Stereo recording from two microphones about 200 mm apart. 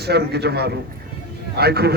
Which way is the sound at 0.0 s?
55° right (ahead or behind).